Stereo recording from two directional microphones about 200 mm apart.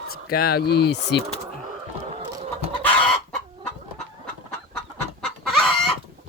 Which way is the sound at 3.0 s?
5° left (ahead or behind).